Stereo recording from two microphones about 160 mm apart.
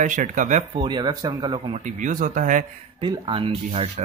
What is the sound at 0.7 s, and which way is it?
Speech, 30° right (ahead or behind).